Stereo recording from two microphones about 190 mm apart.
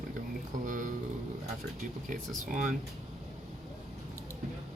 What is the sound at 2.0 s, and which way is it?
Speech, 45° right (ahead or behind).